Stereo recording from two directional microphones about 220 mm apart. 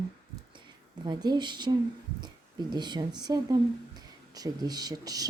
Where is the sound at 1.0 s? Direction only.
20° right (ahead or behind).